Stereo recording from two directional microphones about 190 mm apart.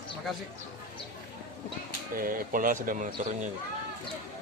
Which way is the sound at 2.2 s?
50° right (ahead or behind).